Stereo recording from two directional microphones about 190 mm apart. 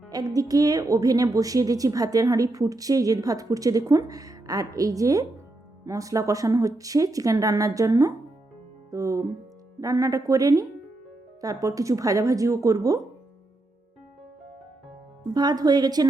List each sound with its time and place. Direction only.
0.1 s a woman's voice: 20° right (ahead or behind)
15.3 s a woman's voice: 20° right (ahead or behind)